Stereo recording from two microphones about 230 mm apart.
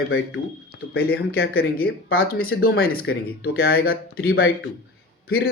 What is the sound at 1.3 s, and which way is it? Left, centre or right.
Speech, left.